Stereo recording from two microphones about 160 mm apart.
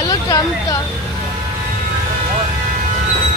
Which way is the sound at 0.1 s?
20° left (ahead or behind).